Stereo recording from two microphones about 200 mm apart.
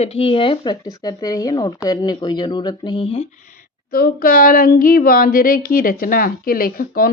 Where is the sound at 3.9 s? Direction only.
45° left (ahead or behind).